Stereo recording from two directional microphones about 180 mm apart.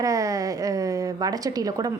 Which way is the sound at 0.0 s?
20° right (ahead or behind).